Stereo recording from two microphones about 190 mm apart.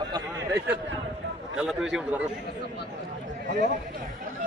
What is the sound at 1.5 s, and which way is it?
Speech, 5° right (ahead or behind).